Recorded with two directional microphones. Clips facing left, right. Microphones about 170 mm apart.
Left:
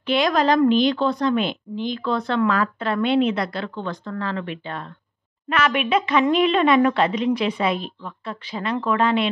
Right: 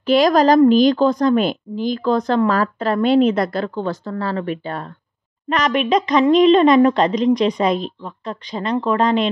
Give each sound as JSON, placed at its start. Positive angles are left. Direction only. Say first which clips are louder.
{"t": 0.0, "sound": "a woman's voice", "louder": "right 6 dB", "side_deg": -40}